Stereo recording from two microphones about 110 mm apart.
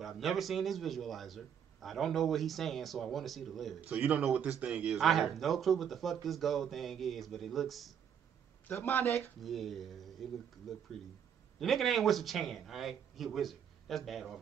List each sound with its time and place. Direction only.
0.0 s a man's voice: centre (ahead or behind)
8.6 s a man's voice: 15° left (ahead or behind)
9.4 s a man's voice: centre (ahead or behind)